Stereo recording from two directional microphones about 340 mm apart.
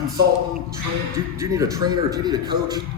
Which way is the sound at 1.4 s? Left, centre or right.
Centre.